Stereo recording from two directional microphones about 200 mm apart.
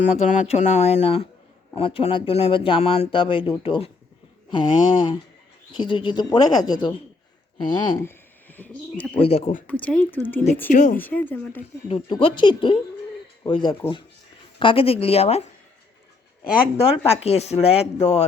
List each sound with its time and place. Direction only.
0.0 s speech: 35° left (ahead or behind)
8.0 s bird: 10° left (ahead or behind)
9.2 s speech: 30° left (ahead or behind)
9.6 s speech: 5° left (ahead or behind)
10.7 s speech: 40° left (ahead or behind)
11.0 s speech: 10° left (ahead or behind)
11.9 s speech: 30° left (ahead or behind)
16.7 s speech: 30° left (ahead or behind)